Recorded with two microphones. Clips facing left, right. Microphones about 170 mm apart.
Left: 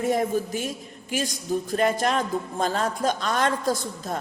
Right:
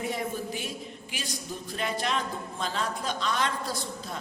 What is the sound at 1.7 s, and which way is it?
A man's voice, 45° left (ahead or behind).